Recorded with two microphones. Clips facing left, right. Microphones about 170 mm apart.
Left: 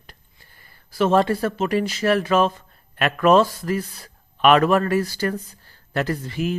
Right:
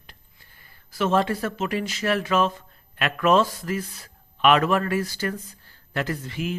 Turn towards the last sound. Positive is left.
turn(degrees=40)  # may be behind; listen again after turning